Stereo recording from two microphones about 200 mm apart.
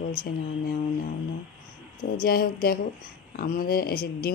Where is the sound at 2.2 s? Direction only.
45° left (ahead or behind).